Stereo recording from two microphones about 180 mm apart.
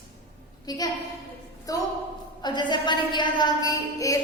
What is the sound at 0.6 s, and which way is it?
A woman's voice, 20° left (ahead or behind).